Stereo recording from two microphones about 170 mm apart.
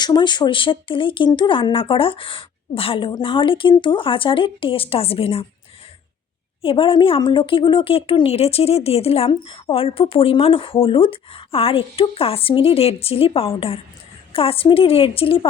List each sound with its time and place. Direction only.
0.0 s speech: 25° left (ahead or behind)
6.6 s speech: 30° left (ahead or behind)